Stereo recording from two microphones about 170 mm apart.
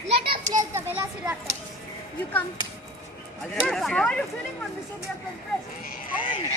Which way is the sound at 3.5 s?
Centre (ahead or behind).